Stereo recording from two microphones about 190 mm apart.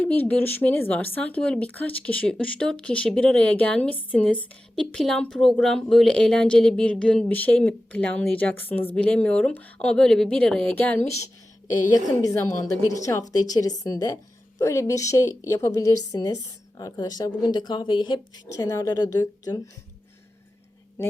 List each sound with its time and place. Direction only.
0.0 s a woman's voice: 10° left (ahead or behind)
12.0 s a woman's voice: 20° left (ahead or behind)